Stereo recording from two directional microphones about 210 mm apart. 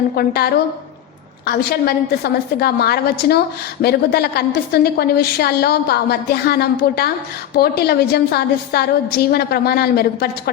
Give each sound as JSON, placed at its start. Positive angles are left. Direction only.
{"t": 0.2, "sound": "a woman's voice", "side_deg": 50}